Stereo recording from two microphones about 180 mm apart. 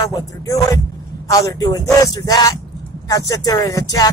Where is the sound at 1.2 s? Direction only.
20° left (ahead or behind).